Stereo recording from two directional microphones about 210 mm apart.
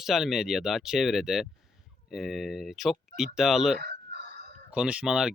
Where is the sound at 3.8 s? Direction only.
50° right (ahead or behind).